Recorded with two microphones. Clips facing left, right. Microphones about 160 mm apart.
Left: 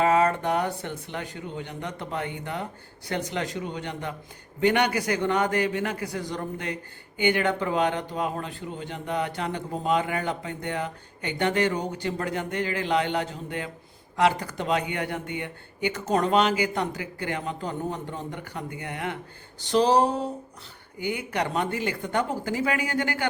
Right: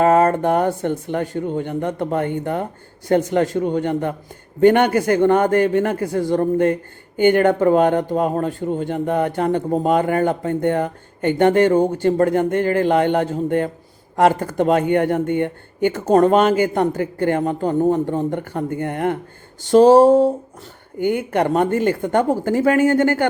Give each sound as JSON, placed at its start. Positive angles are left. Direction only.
{"t": 0.0, "sound": "a man's voice", "side_deg": -50}